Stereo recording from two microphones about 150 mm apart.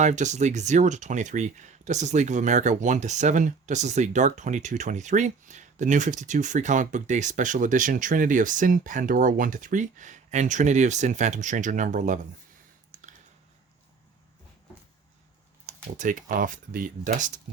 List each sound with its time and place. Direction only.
0.0 s speech: 50° right (ahead or behind)
15.6 s speech: 60° right (ahead or behind)